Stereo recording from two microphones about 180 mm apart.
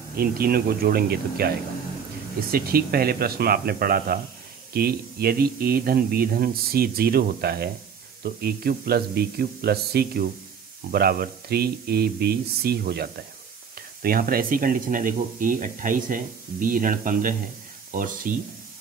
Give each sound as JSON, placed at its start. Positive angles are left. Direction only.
{"t": 0.1, "sound": "speech", "side_deg": -55}
{"t": 2.5, "sound": "speech", "side_deg": -55}